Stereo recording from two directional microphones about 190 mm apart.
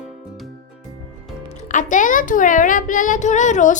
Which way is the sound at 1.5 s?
40° left (ahead or behind).